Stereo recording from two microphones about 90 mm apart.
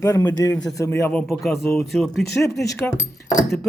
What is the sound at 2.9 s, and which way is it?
Speech, 30° left (ahead or behind).